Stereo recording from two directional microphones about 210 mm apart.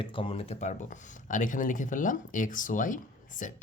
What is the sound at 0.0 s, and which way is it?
Speech, 25° left (ahead or behind).